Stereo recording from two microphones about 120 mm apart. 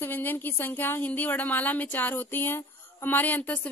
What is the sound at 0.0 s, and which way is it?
Speech, 15° left (ahead or behind).